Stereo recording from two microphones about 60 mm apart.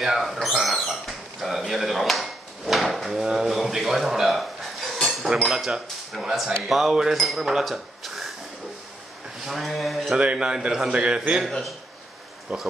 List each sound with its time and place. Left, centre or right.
0.0 s a sound: centre
5.3 s a man's voice: centre
9.4 s speech: centre
10.1 s a man's voice: centre
12.5 s speech: centre